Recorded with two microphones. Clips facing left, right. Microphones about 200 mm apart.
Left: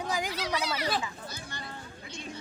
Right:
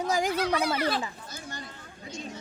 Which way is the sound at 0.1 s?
45° right (ahead or behind).